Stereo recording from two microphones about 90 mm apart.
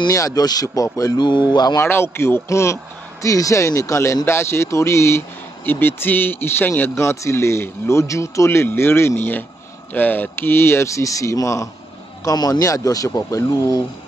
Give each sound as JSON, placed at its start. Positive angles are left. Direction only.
{"t": 0.1, "sound": "a man's voice", "side_deg": 40}
{"t": 1.5, "sound": "speech", "side_deg": 55}
{"t": 1.8, "sound": "a man's voice", "side_deg": 25}